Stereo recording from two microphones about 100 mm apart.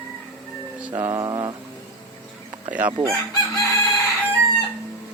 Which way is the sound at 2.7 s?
15° right (ahead or behind).